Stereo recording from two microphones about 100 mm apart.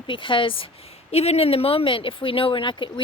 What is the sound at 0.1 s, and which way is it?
Speech, 55° left (ahead or behind).